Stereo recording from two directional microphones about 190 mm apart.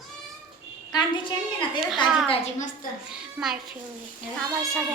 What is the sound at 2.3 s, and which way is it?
Speech, 35° left (ahead or behind).